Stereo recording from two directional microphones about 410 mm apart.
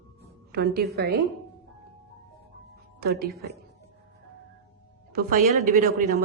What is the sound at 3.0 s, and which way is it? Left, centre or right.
Speech, right.